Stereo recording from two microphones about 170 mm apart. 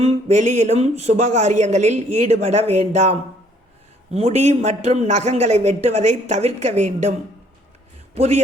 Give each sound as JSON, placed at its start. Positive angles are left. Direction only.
{"t": 0.0, "sound": "a man's voice", "side_deg": -45}